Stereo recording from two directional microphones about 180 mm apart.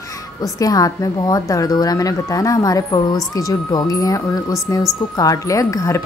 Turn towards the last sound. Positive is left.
turn(degrees=20)  # may be behind; listen again after turning